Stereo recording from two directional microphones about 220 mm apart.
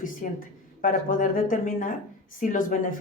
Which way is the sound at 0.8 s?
40° left (ahead or behind).